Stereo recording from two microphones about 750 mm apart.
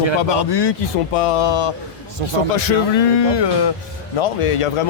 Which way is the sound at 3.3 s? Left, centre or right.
Left.